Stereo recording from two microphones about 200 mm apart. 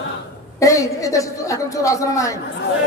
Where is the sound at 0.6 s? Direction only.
15° left (ahead or behind).